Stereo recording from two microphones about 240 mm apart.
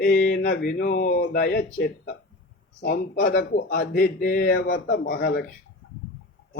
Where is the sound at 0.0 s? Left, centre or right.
Left.